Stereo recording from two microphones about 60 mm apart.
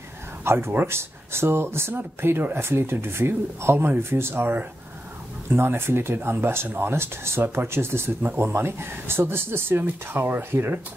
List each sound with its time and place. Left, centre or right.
0.4 s speech: right